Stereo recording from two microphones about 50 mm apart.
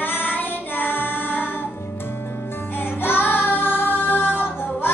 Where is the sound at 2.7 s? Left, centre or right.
Left.